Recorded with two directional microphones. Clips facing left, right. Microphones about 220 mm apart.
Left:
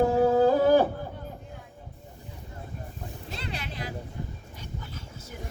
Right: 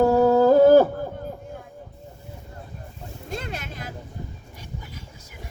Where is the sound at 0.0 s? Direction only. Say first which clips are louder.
Right 4 dB; 40° right (ahead or behind).